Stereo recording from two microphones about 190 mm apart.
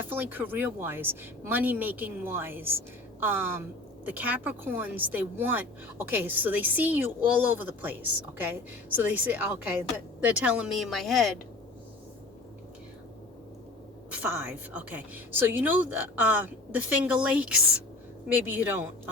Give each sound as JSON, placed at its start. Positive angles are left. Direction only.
{"t": 0.0, "sound": "speech", "side_deg": -10}
{"t": 9.0, "sound": "speech", "side_deg": -10}
{"t": 14.1, "sound": "speech", "side_deg": -10}